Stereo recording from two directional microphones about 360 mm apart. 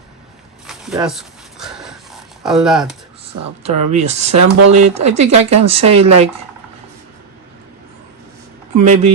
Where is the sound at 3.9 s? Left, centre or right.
Centre.